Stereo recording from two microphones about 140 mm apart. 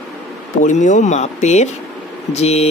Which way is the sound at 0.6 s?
60° left (ahead or behind).